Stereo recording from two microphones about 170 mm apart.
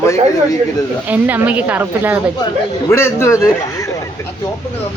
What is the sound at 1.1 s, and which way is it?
A woman's voice, 10° right (ahead or behind).